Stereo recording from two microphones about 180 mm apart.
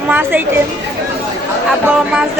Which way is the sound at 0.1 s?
10° right (ahead or behind).